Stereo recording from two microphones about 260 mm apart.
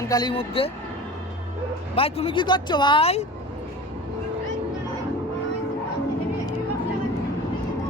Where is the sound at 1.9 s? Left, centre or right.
Left.